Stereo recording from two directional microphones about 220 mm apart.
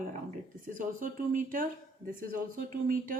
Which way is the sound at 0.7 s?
40° right (ahead or behind).